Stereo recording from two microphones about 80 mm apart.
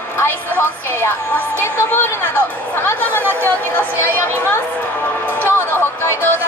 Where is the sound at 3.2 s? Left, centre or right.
Right.